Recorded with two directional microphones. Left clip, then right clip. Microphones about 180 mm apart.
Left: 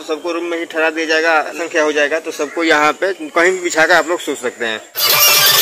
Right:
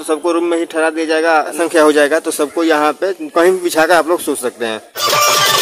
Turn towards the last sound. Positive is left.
turn(degrees=-10)  # may be behind; listen again after turning